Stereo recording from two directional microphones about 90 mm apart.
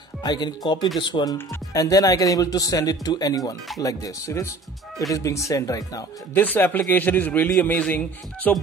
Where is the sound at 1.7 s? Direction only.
40° left (ahead or behind).